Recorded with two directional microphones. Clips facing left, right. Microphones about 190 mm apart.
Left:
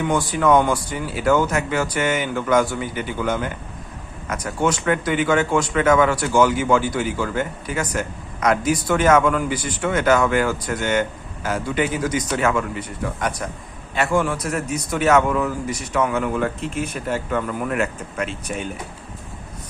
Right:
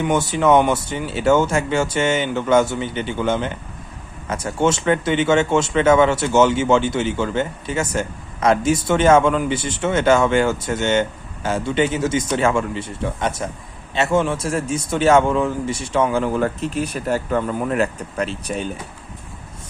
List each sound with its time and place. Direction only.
0.0 s speech: 25° right (ahead or behind)